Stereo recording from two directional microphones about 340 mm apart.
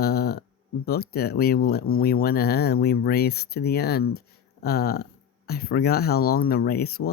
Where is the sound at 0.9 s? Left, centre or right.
Left.